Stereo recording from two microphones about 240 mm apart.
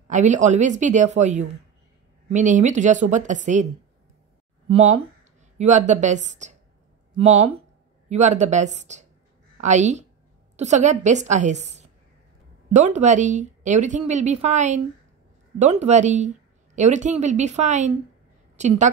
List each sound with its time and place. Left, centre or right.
0.1 s a woman's voice: right
5.6 s a woman's voice: right